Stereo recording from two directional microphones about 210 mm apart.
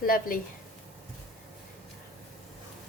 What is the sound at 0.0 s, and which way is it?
Speech, 40° left (ahead or behind).